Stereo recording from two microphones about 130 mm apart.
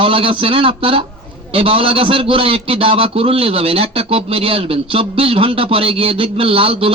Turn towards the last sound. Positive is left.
turn(degrees=-45)  # may be behind; listen again after turning